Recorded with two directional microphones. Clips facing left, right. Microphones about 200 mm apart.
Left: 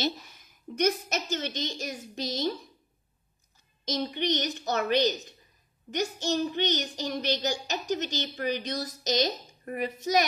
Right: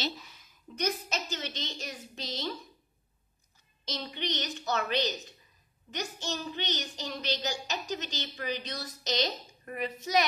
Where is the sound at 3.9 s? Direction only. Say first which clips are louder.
Left 7 dB; 50° left (ahead or behind).